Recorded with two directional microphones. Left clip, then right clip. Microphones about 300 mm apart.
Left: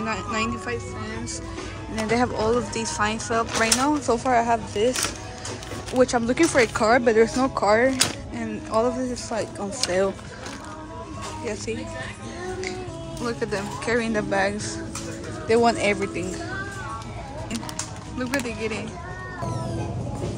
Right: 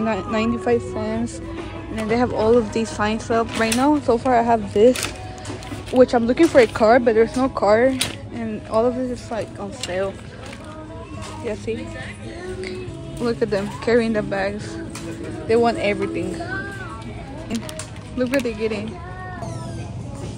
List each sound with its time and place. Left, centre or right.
0.0 s speech: centre
2.0 s speech: centre
5.9 s speech: centre
13.2 s speech: centre
18.2 s speech: centre